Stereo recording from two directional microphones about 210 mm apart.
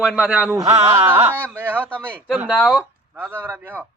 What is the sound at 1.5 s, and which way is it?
Speech, 10° right (ahead or behind).